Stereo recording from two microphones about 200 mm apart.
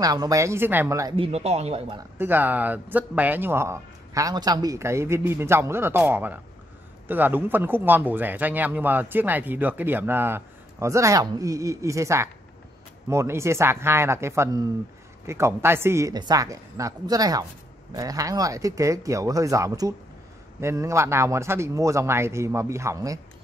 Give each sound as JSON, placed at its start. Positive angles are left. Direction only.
{"t": 0.0, "sound": "speech", "side_deg": -20}
{"t": 1.1, "sound": "speech", "side_deg": -30}
{"t": 2.0, "sound": "speech", "side_deg": -10}